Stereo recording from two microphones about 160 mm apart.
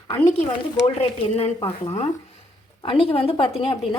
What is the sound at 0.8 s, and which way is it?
A woman's voice, 40° left (ahead or behind).